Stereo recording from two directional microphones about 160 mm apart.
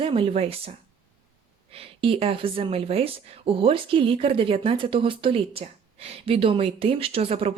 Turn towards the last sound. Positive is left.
turn(degrees=-35)  # may be behind; listen again after turning